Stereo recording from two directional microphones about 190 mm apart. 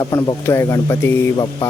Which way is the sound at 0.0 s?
20° left (ahead or behind).